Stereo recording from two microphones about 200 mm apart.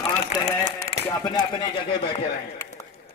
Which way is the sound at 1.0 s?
20° left (ahead or behind).